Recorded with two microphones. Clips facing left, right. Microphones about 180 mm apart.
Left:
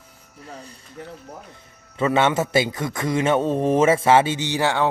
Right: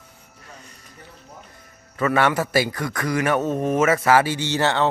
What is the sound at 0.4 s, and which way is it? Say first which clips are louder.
Speech: left 7 dB; 35° left (ahead or behind).